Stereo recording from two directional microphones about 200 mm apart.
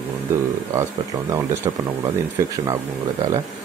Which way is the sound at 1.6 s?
20° right (ahead or behind).